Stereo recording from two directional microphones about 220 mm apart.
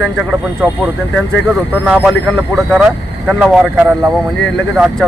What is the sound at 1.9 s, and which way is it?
Speech, 5° right (ahead or behind).